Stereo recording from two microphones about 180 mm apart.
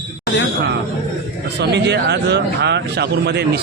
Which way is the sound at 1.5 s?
75° right (ahead or behind).